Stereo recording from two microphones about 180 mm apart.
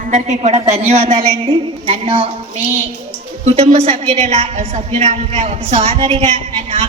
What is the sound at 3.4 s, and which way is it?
A woman's voice, 35° right (ahead or behind).